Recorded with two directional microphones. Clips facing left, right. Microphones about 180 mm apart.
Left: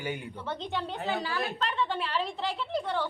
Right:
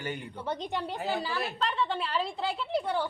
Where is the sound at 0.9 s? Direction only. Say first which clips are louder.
Even; centre (ahead or behind).